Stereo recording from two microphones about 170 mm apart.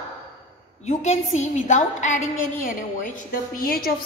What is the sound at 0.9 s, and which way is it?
A woman's voice, 45° left (ahead or behind).